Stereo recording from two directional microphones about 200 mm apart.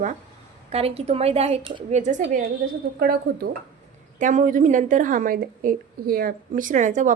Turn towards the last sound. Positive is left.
turn(degrees=-40)  # may be behind; listen again after turning